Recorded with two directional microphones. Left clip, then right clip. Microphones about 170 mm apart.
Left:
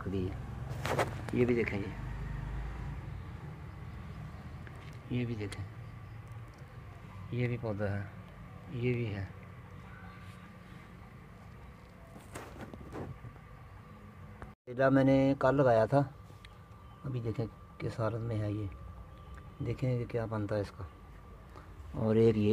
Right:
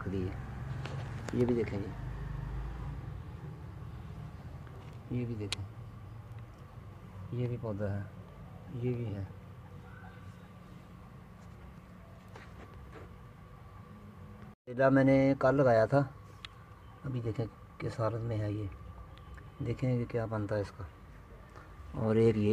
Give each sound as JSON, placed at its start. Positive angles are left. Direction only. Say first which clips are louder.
{"t": 0.0, "sound": "a sound", "louder": "left 1 dB", "side_deg": 5}
{"t": 1.2, "sound": "speech", "louder": "right 4 dB", "side_deg": -5}
{"t": 5.1, "sound": "speech", "louder": "left 1 dB", "side_deg": 10}
{"t": 7.3, "sound": "speech", "louder": "left 2 dB", "side_deg": 10}
{"t": 14.7, "sound": "speech", "louder": "right 1 dB", "side_deg": 0}
{"t": 17.1, "sound": "speech", "louder": "even", "side_deg": 0}
{"t": 21.9, "sound": "speech", "louder": "left 1 dB", "side_deg": 5}